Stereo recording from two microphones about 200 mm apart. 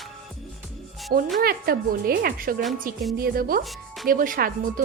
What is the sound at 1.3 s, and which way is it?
A woman's voice, 50° right (ahead or behind).